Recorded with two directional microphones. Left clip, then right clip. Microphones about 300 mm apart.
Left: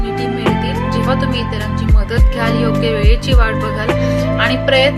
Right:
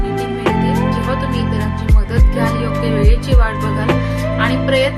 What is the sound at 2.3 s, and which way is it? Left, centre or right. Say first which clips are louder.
Music: left 2 dB; left.